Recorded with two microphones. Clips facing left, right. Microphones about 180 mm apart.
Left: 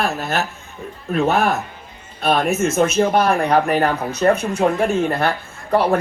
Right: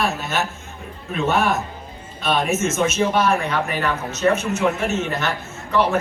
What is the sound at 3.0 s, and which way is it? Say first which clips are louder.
Speech: left 1 dB; 55° left (ahead or behind).